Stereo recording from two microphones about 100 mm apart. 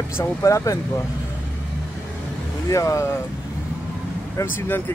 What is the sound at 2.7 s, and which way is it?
Speech, 30° left (ahead or behind).